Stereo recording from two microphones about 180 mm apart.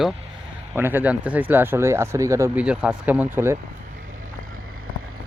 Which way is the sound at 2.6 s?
5° right (ahead or behind).